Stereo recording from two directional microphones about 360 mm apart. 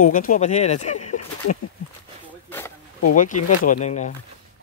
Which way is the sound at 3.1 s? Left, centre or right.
Left.